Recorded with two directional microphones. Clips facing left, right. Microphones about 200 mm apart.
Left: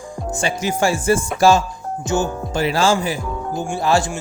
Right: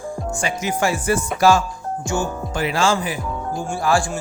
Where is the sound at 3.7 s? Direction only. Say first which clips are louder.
Left 2 dB; 20° left (ahead or behind).